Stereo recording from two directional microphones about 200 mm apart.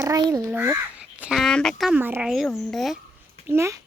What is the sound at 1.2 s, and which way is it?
Speech, centre (ahead or behind).